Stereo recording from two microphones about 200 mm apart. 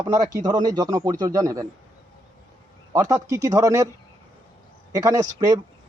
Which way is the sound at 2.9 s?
15° right (ahead or behind).